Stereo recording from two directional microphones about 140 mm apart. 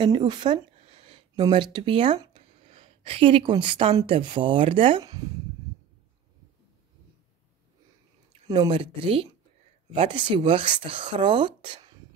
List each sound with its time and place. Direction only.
0.0 s a sound: 35° right (ahead or behind)
1.4 s speech: 30° right (ahead or behind)
8.5 s speech: 35° right (ahead or behind)